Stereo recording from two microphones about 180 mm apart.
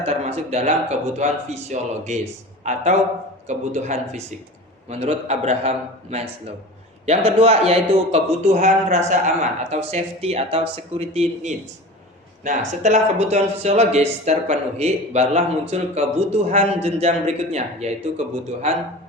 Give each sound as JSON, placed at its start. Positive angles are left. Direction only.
{"t": 0.0, "sound": "speech", "side_deg": -35}
{"t": 7.3, "sound": "speech", "side_deg": -35}